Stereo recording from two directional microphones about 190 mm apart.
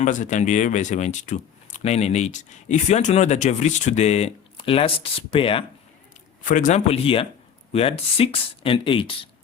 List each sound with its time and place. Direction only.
0.0 s speech: 40° left (ahead or behind)
6.4 s speech: 45° left (ahead or behind); by 9.3 s 25° left (ahead or behind)